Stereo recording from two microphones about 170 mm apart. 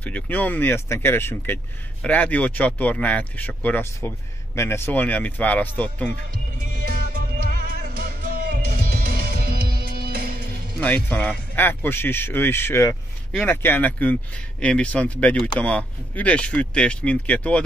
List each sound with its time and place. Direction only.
0.0 s speech: 10° left (ahead or behind)
6.7 s music: 60° right (ahead or behind)
10.8 s speech: 10° left (ahead or behind)